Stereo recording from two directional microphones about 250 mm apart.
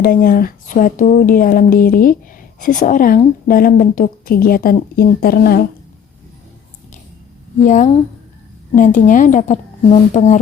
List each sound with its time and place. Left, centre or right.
0.0 s a woman's voice: left
7.6 s a woman's voice: left